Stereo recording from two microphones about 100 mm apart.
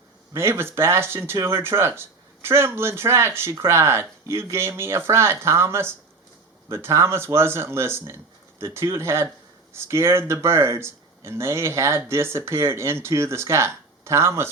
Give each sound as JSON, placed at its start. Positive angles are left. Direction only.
{"t": 0.3, "sound": "speech", "side_deg": -25}